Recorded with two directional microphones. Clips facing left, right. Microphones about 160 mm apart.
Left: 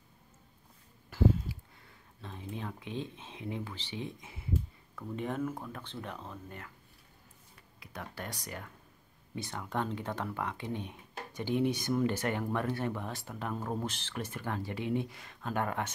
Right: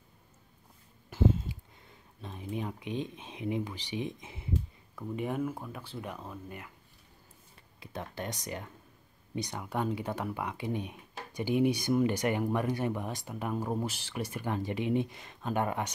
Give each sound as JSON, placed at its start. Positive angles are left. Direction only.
{"t": 1.1, "sound": "a sound", "side_deg": -20}
{"t": 2.2, "sound": "speech", "side_deg": -15}
{"t": 4.9, "sound": "speech", "side_deg": -10}
{"t": 7.8, "sound": "speech", "side_deg": -25}